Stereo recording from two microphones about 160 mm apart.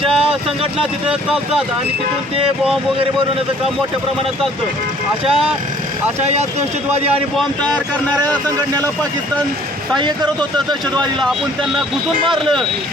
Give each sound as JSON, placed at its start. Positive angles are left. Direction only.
{"t": 0.1, "sound": "vehicle", "side_deg": -5}
{"t": 0.8, "sound": "speech", "side_deg": -5}
{"t": 5.2, "sound": "speech", "side_deg": 0}
{"t": 6.9, "sound": "speech", "side_deg": -40}
{"t": 7.3, "sound": "speech", "side_deg": 5}
{"t": 8.2, "sound": "speech", "side_deg": -25}
{"t": 11.2, "sound": "speech", "side_deg": 0}